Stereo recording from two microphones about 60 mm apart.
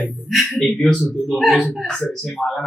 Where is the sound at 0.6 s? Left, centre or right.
Centre.